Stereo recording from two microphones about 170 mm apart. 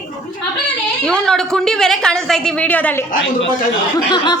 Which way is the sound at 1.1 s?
5° left (ahead or behind).